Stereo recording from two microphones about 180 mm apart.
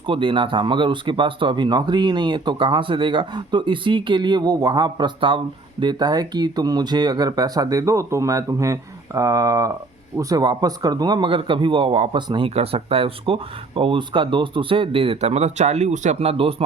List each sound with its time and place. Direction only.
0.1 s speech: 30° right (ahead or behind)